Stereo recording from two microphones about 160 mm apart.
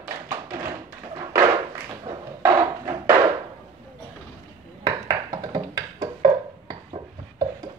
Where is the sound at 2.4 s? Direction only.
25° right (ahead or behind).